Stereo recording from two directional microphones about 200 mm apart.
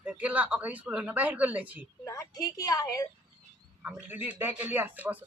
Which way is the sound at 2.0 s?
15° left (ahead or behind).